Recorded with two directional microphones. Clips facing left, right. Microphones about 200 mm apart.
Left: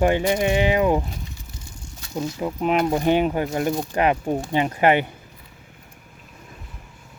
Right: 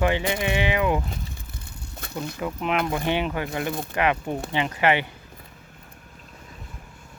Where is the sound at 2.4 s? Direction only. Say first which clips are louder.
Left 4 dB; 35° left (ahead or behind).